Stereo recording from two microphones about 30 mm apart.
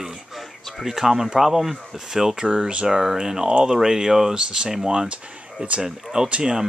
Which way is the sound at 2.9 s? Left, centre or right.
Centre.